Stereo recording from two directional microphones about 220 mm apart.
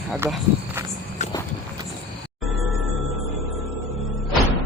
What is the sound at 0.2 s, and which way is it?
Speech, 10° right (ahead or behind).